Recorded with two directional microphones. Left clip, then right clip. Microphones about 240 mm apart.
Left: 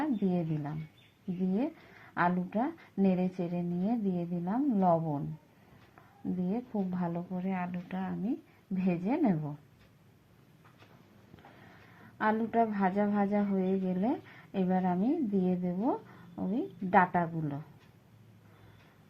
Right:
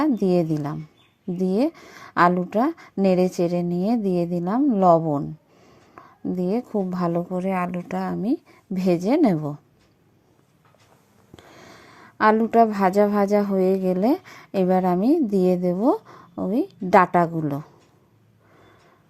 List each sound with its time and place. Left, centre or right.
0.0 s a woman's voice: right
6.4 s a woman's voice: right
11.7 s a woman's voice: right